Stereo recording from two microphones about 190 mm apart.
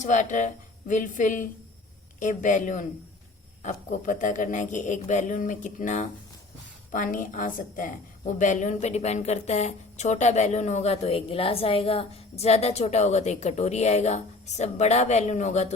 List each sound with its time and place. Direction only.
0.0 s a woman's voice: 40° left (ahead or behind)